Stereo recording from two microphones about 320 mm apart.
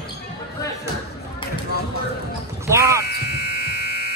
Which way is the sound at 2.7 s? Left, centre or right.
Centre.